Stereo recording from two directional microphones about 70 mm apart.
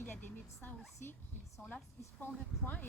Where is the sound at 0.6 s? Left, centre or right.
Left.